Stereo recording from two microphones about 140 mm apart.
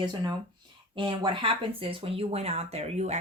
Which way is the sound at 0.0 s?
30° right (ahead or behind).